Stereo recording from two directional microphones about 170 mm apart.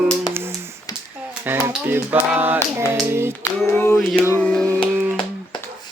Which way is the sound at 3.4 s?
15° left (ahead or behind).